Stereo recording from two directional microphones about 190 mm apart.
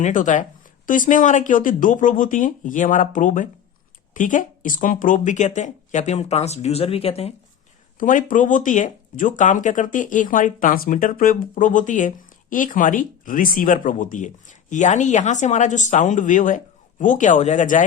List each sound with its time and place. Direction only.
0.0 s speech: 40° left (ahead or behind)
7.9 s speech: 45° left (ahead or behind)